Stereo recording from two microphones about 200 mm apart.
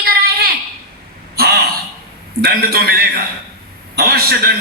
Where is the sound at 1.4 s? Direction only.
50° right (ahead or behind).